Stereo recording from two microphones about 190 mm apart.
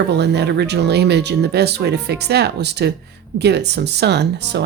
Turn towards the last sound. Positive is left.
turn(degrees=-60)  # may be behind; listen again after turning